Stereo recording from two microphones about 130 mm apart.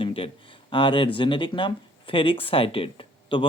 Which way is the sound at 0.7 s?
40° left (ahead or behind).